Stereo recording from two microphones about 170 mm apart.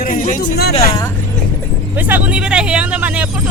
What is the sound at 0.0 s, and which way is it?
Speech, 50° left (ahead or behind).